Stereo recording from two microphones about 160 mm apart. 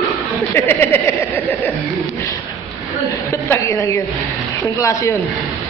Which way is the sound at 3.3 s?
20° left (ahead or behind).